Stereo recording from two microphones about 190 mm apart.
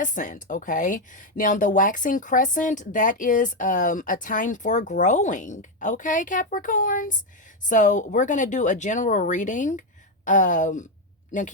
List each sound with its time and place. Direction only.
0.0 s speech: 40° left (ahead or behind)